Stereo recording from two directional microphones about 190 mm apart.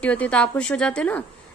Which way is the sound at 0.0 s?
5° left (ahead or behind).